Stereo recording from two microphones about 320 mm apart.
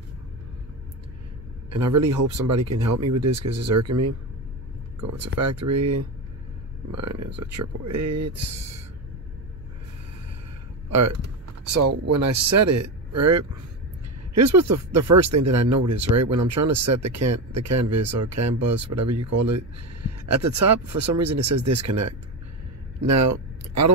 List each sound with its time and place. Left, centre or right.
1.7 s speech: right
10.9 s speech: right
22.9 s a sound: right